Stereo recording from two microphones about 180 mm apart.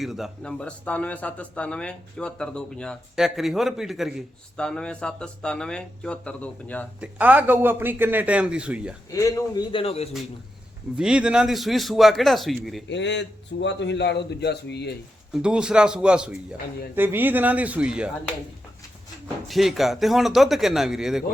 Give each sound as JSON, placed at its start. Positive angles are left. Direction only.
{"t": 0.0, "sound": "a man's voice", "side_deg": 0}
{"t": 7.0, "sound": "a man's voice", "side_deg": -10}
{"t": 9.0, "sound": "a man's voice", "side_deg": 20}
{"t": 10.9, "sound": "a man's voice", "side_deg": -5}
{"t": 12.9, "sound": "a man's voice", "side_deg": 80}
{"t": 15.3, "sound": "a man's voice", "side_deg": -5}
{"t": 19.5, "sound": "a man's voice", "side_deg": 0}